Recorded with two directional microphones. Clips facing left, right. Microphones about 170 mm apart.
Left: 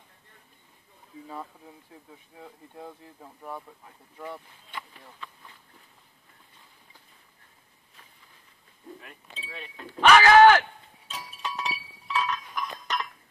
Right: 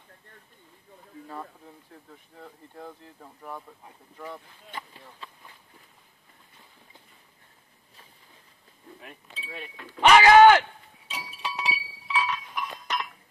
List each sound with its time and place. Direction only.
2.0 s speech: 10° left (ahead or behind)
9.9 s speech: 20° right (ahead or behind)
11.1 s chink: 10° right (ahead or behind)